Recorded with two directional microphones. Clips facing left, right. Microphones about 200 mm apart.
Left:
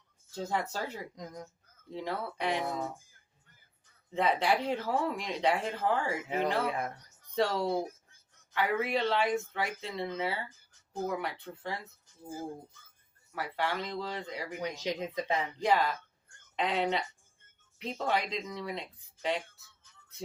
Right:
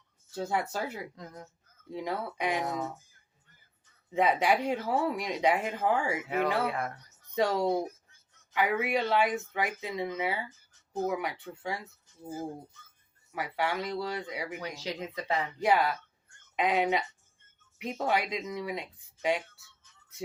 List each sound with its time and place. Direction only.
0.4 s speech: 10° right (ahead or behind)
1.1 s speech: 15° left (ahead or behind)
1.9 s speech: 10° right (ahead or behind)
4.1 s speech: 10° right (ahead or behind)
6.2 s speech: 20° left (ahead or behind)
7.3 s speech: 15° right (ahead or behind)
13.3 s speech: 10° right (ahead or behind)
14.6 s speech: 20° left (ahead or behind)
15.6 s speech: 10° right (ahead or behind)